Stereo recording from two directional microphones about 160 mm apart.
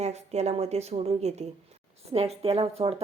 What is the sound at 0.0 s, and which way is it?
A woman's voice, 45° right (ahead or behind).